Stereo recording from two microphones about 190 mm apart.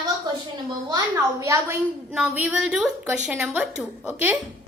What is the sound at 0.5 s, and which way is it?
A woman's voice, 20° right (ahead or behind).